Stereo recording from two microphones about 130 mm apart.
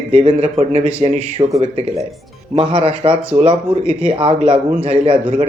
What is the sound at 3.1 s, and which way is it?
Speech, 10° right (ahead or behind).